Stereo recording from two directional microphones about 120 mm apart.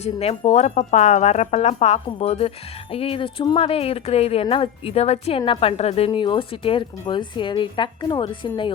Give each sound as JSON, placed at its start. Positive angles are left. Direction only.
{"t": 0.0, "sound": "a woman's voice", "side_deg": 60}
{"t": 6.1, "sound": "a woman's voice", "side_deg": 45}